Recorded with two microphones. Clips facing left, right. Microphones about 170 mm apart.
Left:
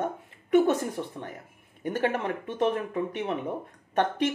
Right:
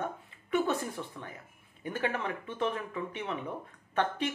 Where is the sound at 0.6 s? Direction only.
20° left (ahead or behind).